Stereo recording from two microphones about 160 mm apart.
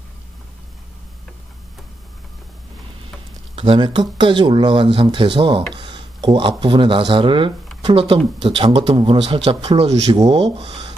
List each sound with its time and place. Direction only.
3.5 s speech: 35° right (ahead or behind)
10.1 s speech: 25° right (ahead or behind)
10.4 s speech: 35° right (ahead or behind)